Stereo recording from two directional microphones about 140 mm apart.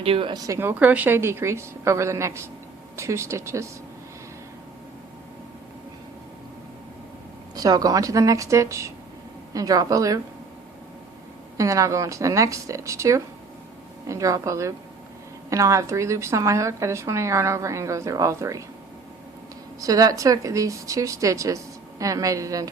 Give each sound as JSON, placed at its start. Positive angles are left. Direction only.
{"t": 0.0, "sound": "speech", "side_deg": -40}
{"t": 7.5, "sound": "speech", "side_deg": -25}
{"t": 11.5, "sound": "speech", "side_deg": -25}
{"t": 19.8, "sound": "speech", "side_deg": -25}